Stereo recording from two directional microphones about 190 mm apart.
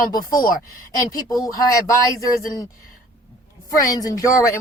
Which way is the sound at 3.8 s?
20° left (ahead or behind).